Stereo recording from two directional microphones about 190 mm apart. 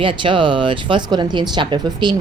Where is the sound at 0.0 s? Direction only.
25° right (ahead or behind).